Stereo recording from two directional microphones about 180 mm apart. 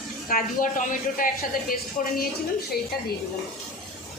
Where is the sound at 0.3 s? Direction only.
50° left (ahead or behind).